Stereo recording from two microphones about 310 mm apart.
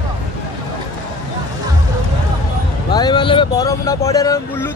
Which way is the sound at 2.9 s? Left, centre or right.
Centre.